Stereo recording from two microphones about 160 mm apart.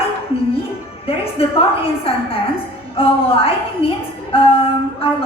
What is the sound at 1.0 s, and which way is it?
A woman's voice, 35° left (ahead or behind).